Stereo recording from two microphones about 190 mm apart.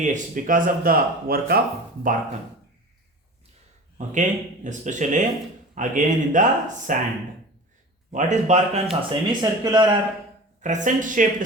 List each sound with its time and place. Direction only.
0.0 s speech: 45° right (ahead or behind)
3.9 s speech: 40° right (ahead or behind)
8.1 s speech: 40° right (ahead or behind); by 10.0 s 25° right (ahead or behind)
10.6 s speech: 40° right (ahead or behind)